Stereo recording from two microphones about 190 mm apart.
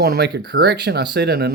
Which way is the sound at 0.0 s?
60° right (ahead or behind).